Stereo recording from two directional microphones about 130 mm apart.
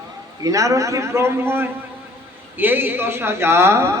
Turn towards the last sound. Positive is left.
turn(degrees=-20)  # may be behind; listen again after turning